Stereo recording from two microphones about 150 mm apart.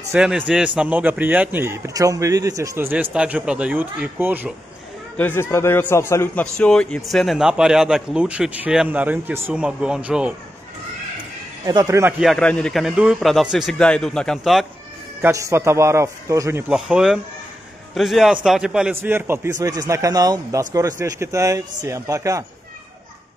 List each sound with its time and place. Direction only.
0.1 s a man's voice: 5° right (ahead or behind)
5.1 s speech: 15° left (ahead or behind)
6.4 s a man's voice: 5° left (ahead or behind)
11.6 s a man's voice: 25° right (ahead or behind)
12.0 s a man's voice: 10° right (ahead or behind)
12.3 s a man's voice: 5° left (ahead or behind)
15.2 s a man's voice: 20° right (ahead or behind)
16.6 s a man's voice: 5° right (ahead or behind)